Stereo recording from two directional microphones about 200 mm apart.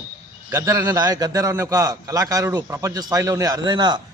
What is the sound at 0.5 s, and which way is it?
A man's voice, 15° right (ahead or behind).